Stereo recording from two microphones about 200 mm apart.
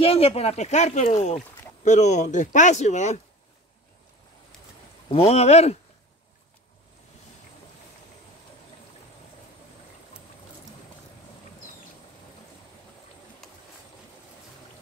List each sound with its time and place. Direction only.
0.0 s speech: 30° left (ahead or behind)
5.1 s speech: 30° left (ahead or behind)
13.4 s vehicle: centre (ahead or behind)